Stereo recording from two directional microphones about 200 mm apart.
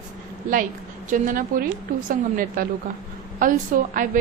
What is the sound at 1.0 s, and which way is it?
A woman's voice, 40° right (ahead or behind).